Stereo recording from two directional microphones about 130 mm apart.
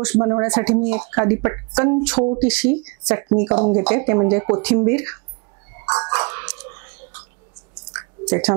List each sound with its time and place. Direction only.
0.0 s speech: 25° right (ahead or behind)
5.9 s a sound: 25° right (ahead or behind)
8.5 s speech: 25° right (ahead or behind)